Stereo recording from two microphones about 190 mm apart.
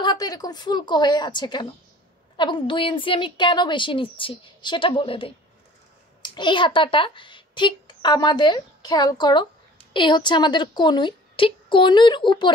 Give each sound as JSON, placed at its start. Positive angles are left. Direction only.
{"t": 0.0, "sound": "a woman's voice", "side_deg": 20}